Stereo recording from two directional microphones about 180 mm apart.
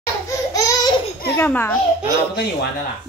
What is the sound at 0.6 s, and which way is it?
Laughter, 20° left (ahead or behind).